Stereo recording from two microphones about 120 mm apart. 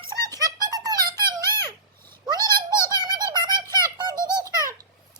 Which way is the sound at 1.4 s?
20° left (ahead or behind).